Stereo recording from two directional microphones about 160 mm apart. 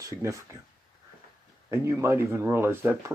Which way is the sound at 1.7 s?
15° right (ahead or behind).